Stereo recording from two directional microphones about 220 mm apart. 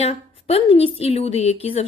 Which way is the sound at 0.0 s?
30° left (ahead or behind).